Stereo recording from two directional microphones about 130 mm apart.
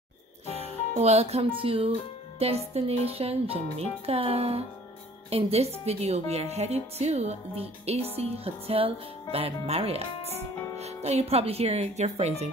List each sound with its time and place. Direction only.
0.5 s music: 55° left (ahead or behind)
0.9 s speech: 55° right (ahead or behind)